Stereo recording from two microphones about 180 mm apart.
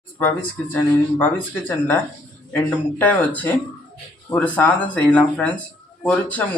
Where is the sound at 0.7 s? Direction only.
10° left (ahead or behind).